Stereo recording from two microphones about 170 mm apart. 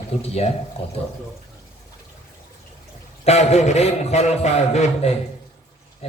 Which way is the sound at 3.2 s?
40° left (ahead or behind).